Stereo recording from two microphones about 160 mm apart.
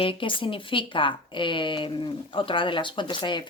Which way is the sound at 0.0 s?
35° left (ahead or behind).